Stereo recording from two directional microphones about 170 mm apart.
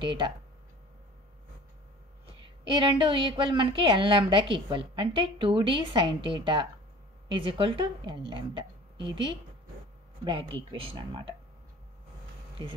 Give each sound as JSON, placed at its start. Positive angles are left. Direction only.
{"t": 0.0, "sound": "speech", "side_deg": -30}
{"t": 2.2, "sound": "a woman's voice", "side_deg": -30}